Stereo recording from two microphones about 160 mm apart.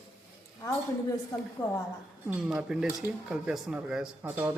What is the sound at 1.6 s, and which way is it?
Speech, 15° left (ahead or behind).